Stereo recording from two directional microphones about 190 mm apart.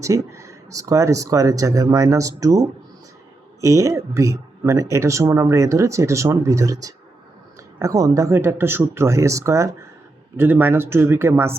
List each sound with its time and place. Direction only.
0.0 s speech: 15° right (ahead or behind)